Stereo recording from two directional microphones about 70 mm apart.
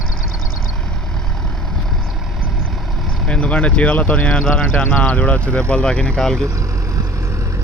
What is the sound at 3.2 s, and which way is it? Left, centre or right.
Speech, centre.